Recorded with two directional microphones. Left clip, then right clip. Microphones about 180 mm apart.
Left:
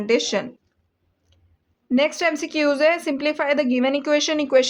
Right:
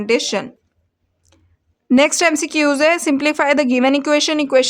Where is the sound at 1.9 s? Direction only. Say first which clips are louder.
Right 6 dB; 40° right (ahead or behind).